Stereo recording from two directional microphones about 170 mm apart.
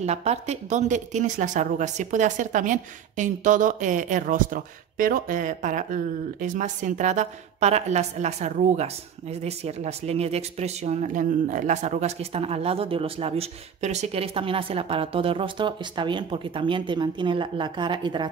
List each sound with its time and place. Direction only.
0.0 s speech: 40° right (ahead or behind)